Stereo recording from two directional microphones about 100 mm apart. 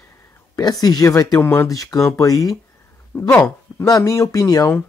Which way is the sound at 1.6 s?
35° left (ahead or behind).